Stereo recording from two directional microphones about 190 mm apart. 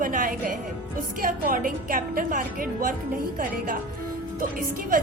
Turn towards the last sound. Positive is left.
turn(degrees=-45)  # may be behind; listen again after turning